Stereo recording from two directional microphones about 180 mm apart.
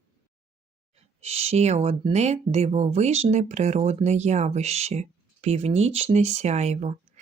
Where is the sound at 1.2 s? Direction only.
35° right (ahead or behind).